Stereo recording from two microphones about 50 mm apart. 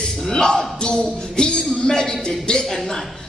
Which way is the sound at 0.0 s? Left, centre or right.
Centre.